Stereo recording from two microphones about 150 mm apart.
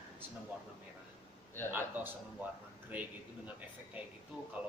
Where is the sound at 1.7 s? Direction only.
15° right (ahead or behind).